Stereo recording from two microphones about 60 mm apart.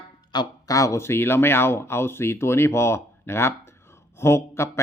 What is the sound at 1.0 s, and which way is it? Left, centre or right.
Speech, left.